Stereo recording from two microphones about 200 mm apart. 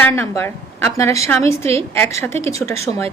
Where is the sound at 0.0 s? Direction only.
10° left (ahead or behind).